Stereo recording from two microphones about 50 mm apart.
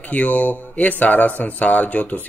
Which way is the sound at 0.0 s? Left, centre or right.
Left.